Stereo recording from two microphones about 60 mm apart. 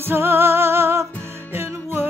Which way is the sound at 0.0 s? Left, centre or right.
Right.